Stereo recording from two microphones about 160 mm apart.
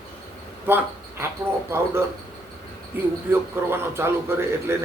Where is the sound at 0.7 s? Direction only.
15° right (ahead or behind).